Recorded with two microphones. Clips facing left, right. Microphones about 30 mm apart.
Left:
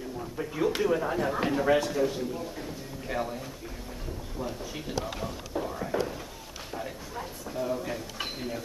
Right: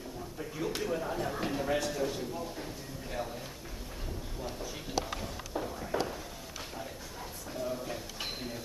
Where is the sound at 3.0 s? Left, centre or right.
Left.